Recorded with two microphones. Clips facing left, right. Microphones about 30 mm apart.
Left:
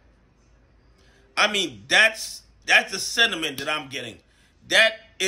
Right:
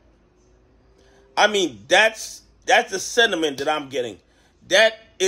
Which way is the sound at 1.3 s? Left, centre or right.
Left.